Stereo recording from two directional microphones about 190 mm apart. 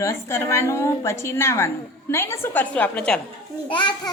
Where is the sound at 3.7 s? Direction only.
25° left (ahead or behind).